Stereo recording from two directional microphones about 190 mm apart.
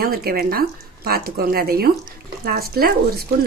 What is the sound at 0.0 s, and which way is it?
Speech, 55° right (ahead or behind).